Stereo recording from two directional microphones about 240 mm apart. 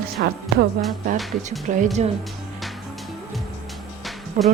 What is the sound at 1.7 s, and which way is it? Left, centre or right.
Speech, right.